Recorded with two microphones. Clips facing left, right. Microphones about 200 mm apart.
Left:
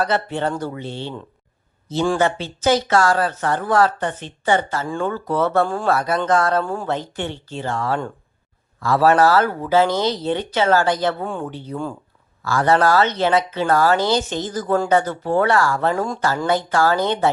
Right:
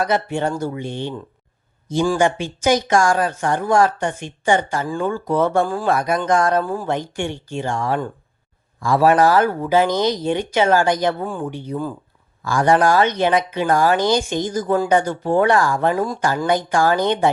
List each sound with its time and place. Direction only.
0.0 s speech: 10° right (ahead or behind)
2.1 s speech: 15° right (ahead or behind)
5.6 s speech: centre (ahead or behind)
5.9 s speech: 15° right (ahead or behind)